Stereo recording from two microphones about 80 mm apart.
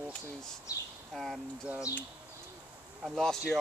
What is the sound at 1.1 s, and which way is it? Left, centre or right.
Speech, centre.